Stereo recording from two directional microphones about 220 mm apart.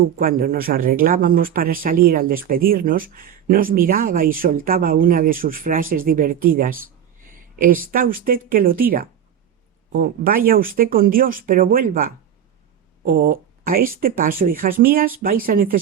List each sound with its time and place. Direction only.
0.2 s speech: 40° right (ahead or behind)
7.3 s a sound: 40° right (ahead or behind)
7.9 s speech: 40° right (ahead or behind)